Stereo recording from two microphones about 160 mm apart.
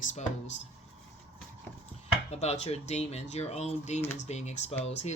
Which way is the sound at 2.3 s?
45° left (ahead or behind).